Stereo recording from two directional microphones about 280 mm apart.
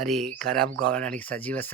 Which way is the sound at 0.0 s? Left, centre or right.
Centre.